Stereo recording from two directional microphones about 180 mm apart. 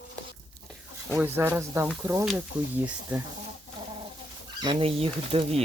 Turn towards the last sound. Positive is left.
turn(degrees=-30)  # may be behind; listen again after turning